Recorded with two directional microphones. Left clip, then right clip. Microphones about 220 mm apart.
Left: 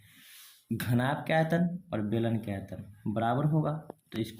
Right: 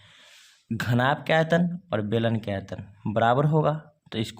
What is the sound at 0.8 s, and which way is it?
Speech, 35° right (ahead or behind).